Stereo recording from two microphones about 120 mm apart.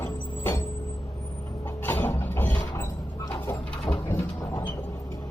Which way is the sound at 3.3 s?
20° left (ahead or behind).